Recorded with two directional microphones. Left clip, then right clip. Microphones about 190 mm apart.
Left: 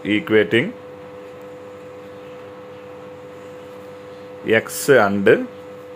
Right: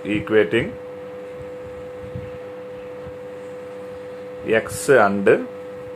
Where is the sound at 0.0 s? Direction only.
30° left (ahead or behind).